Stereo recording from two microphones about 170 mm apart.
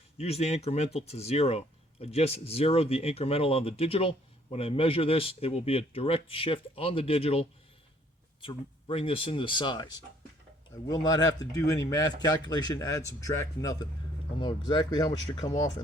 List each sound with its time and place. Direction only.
0.2 s speech: 40° left (ahead or behind); by 15.7 s 20° left (ahead or behind)